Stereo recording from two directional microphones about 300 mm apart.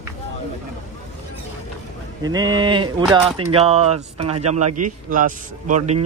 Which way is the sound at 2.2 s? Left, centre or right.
Centre.